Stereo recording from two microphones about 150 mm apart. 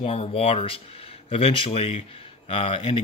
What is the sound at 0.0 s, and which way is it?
Speech, 45° left (ahead or behind).